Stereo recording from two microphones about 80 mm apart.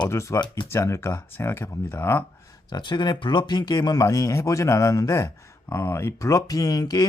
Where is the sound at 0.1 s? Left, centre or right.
Left.